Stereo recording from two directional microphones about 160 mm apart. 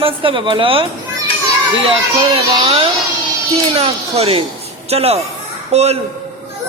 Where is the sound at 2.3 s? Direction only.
35° right (ahead or behind).